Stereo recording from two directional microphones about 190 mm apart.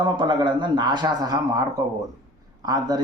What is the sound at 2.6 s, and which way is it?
Speech, 20° right (ahead or behind).